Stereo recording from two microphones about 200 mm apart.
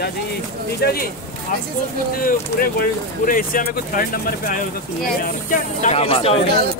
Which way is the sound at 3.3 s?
45° left (ahead or behind).